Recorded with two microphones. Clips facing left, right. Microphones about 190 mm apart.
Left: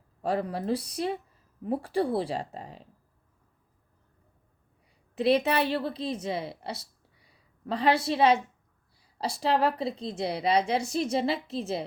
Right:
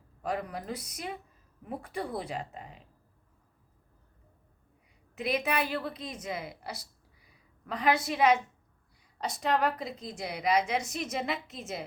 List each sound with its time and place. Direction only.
0.2 s a woman's voice: 30° left (ahead or behind)
5.1 s a woman's voice: 30° left (ahead or behind)